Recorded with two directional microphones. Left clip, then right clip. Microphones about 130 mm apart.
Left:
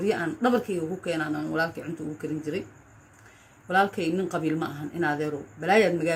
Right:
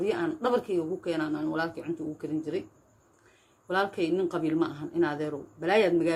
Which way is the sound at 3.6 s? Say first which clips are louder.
Left 4 dB; 25° right (ahead or behind).